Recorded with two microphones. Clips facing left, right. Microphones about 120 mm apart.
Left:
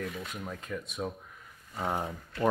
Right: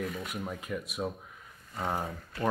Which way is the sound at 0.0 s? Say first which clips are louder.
Right 2 dB; 5° right (ahead or behind).